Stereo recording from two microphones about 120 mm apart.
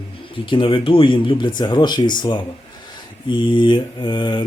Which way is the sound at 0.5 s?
45° left (ahead or behind).